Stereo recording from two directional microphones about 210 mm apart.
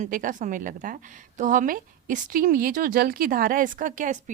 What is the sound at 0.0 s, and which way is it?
A woman's voice, 40° right (ahead or behind).